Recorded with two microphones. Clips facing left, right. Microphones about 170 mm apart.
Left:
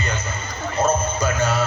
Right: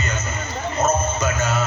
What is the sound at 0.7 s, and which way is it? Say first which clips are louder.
Music: left 1 dB; 30° left (ahead or behind).